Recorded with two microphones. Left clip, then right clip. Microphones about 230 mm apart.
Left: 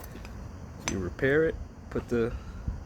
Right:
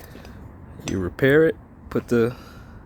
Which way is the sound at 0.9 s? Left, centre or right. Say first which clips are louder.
Right 8 dB; right.